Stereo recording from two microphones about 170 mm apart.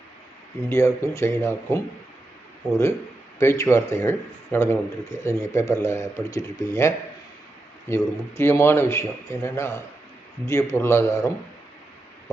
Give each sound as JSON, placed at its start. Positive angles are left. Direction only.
{"t": 0.7, "sound": "speech", "side_deg": 15}
{"t": 3.3, "sound": "speech", "side_deg": 15}